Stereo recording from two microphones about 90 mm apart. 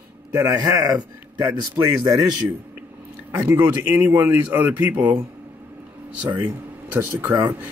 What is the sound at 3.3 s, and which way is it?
Speech, 25° right (ahead or behind).